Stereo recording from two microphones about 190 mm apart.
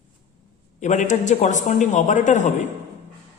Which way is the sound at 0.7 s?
40° left (ahead or behind).